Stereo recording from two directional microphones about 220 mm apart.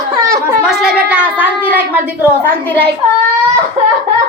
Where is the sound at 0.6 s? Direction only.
5° right (ahead or behind).